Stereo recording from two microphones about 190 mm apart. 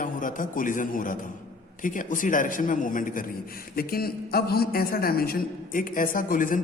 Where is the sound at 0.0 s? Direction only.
45° left (ahead or behind).